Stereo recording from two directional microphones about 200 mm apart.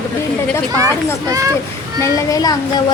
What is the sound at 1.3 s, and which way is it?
Speech, 15° right (ahead or behind).